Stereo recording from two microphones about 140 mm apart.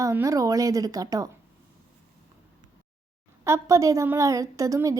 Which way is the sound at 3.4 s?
20° right (ahead or behind).